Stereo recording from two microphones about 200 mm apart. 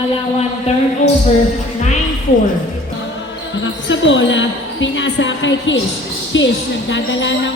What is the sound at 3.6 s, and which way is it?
Basketball bounce, 65° left (ahead or behind).